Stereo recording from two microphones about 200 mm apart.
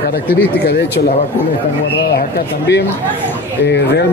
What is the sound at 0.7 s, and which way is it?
Speech, 55° left (ahead or behind).